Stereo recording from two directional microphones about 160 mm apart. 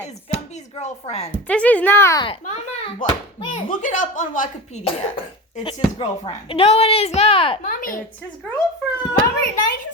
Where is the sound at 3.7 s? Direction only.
55° left (ahead or behind).